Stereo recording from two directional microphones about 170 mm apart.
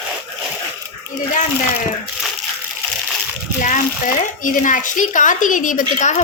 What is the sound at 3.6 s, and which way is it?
Speech, 50° left (ahead or behind).